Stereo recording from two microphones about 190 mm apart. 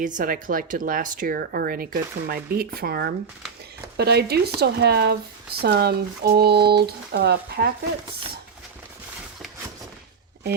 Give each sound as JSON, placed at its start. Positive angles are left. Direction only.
{"t": 0.0, "sound": "speech", "side_deg": -45}